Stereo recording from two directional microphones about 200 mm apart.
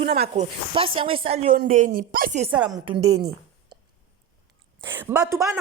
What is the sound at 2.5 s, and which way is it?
Speech, 5° right (ahead or behind).